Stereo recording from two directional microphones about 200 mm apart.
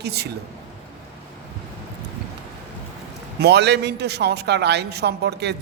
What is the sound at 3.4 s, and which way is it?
A man's voice, 60° right (ahead or behind).